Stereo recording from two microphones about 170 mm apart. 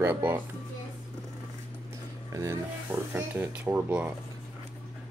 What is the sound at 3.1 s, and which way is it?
Speech, 10° right (ahead or behind).